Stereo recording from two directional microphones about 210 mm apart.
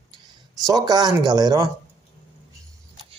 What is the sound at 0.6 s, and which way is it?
Speech, 20° right (ahead or behind).